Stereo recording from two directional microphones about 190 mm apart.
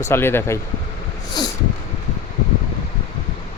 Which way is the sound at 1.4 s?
20° left (ahead or behind).